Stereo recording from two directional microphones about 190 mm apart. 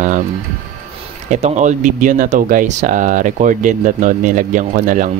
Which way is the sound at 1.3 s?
40° right (ahead or behind).